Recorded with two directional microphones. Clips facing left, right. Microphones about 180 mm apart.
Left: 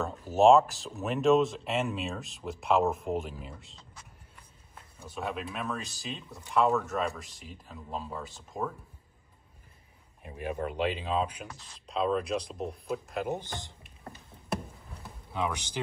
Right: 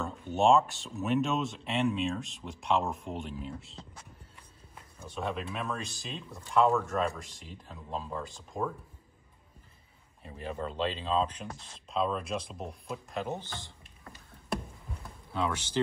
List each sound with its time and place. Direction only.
0.0 s speech: centre (ahead or behind)
5.0 s speech: 5° left (ahead or behind)
10.2 s speech: 15° left (ahead or behind)
11.9 s speech: centre (ahead or behind)
13.3 s speech: 15° left (ahead or behind)
15.3 s speech: 15° left (ahead or behind)